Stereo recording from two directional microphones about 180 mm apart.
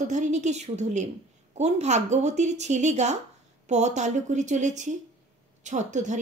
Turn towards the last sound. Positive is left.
turn(degrees=-40)  # may be behind; listen again after turning